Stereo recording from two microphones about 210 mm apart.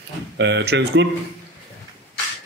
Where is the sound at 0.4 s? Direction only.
55° right (ahead or behind).